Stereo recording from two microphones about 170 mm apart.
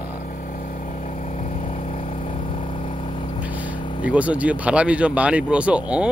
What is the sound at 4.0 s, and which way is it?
Speech, 10° right (ahead or behind).